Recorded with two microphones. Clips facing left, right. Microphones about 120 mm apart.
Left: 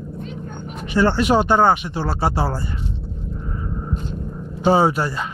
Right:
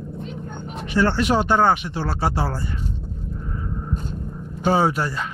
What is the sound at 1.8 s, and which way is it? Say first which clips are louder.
Speech: left 2 dB; 25° left (ahead or behind).